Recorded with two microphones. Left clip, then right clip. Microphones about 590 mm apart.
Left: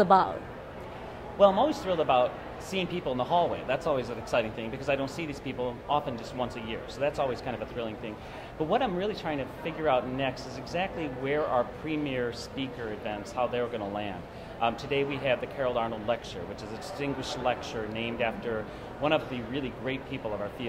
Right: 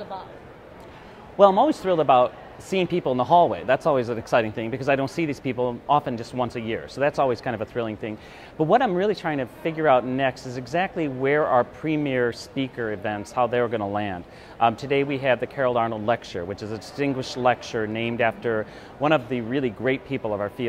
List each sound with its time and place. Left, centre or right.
0.0 s a man's voice: left
1.4 s a man's voice: right